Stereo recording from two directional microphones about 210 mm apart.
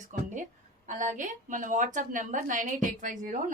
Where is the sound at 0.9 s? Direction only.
35° right (ahead or behind).